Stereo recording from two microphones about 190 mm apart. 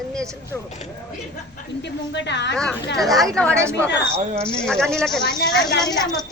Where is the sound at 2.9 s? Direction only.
Centre (ahead or behind).